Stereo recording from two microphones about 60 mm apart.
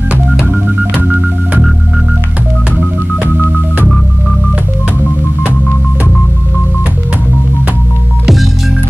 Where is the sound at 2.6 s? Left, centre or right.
Right.